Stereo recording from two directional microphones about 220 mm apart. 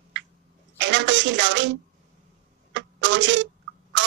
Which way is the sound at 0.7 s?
55° right (ahead or behind).